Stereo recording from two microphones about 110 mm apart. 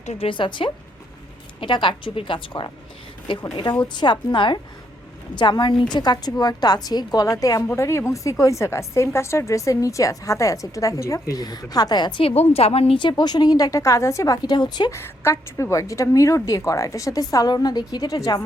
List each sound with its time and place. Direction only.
0.0 s a woman's voice: 80° left
0.3 s a woman's voice: 50° left (ahead or behind)
12.2 s a woman's voice: 65° left (ahead or behind); by 14.9 s 40° left (ahead or behind)
14.9 s a woman's voice: 25° left (ahead or behind); by 18.2 s 40° left (ahead or behind)